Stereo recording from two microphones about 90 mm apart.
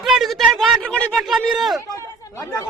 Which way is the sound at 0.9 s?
15° left (ahead or behind).